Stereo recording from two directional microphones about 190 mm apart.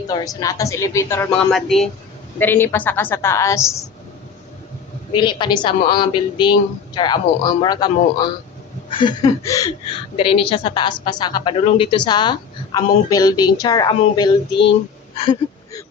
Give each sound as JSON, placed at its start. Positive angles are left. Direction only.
{"t": 0.1, "sound": "a woman's voice", "side_deg": 20}
{"t": 5.1, "sound": "a woman's voice", "side_deg": 25}
{"t": 10.2, "sound": "a woman's voice", "side_deg": 30}
{"t": 15.1, "sound": "a sound", "side_deg": 30}